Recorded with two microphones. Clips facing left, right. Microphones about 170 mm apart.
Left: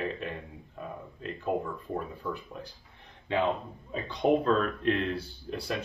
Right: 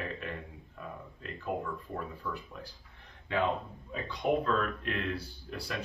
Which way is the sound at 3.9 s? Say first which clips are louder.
Left 5 dB; 25° left (ahead or behind).